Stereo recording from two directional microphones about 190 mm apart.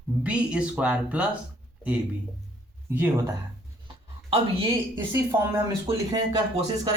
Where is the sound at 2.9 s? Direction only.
15° right (ahead or behind).